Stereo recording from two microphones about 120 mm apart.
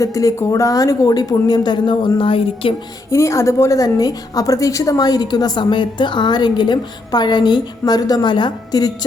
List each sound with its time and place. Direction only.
0.0 s a woman's voice: 30° left (ahead or behind); by 2.7 s 50° left (ahead or behind)
3.1 s a woman's voice: 25° left (ahead or behind)